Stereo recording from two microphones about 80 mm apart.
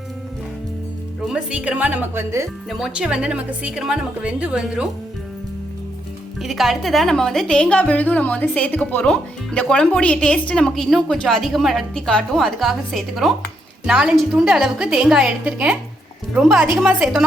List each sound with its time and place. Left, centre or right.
1.3 s a woman's voice: centre
2.6 s a woman's voice: centre
6.4 s a woman's voice: centre
16.4 s speech: centre